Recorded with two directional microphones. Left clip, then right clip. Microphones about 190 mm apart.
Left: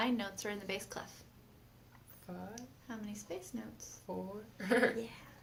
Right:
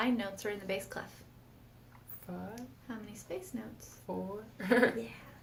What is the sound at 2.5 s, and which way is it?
A woman's voice, 20° left (ahead or behind).